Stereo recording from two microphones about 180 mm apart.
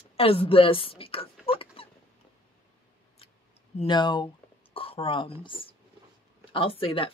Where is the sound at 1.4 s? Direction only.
30° left (ahead or behind).